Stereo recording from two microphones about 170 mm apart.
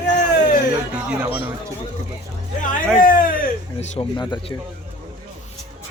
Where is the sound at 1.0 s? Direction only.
5° right (ahead or behind).